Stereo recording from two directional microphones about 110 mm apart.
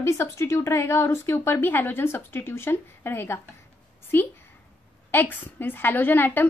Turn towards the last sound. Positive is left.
turn(degrees=20)  # may be behind; listen again after turning